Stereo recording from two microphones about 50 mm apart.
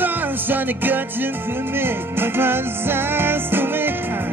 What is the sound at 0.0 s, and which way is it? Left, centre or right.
Music, right.